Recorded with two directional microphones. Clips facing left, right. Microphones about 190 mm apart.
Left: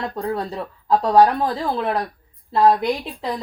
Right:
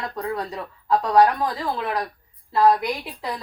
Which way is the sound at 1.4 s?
30° left (ahead or behind).